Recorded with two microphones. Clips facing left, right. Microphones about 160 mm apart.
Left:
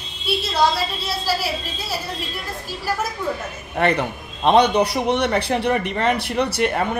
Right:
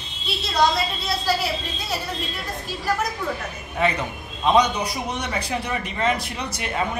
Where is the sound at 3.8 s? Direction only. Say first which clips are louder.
Left 4 dB; 65° left (ahead or behind).